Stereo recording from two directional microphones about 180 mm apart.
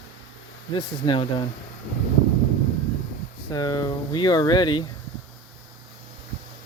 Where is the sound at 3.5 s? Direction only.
20° left (ahead or behind).